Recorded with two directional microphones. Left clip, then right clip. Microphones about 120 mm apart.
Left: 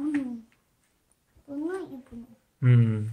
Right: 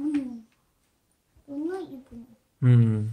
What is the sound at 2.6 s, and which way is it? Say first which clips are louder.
Speech: right 2 dB; 40° right (ahead or behind).